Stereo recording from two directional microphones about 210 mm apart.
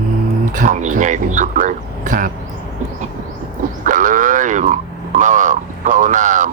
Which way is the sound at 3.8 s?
40° right (ahead or behind).